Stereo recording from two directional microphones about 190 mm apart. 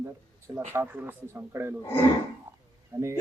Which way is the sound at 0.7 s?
10° right (ahead or behind).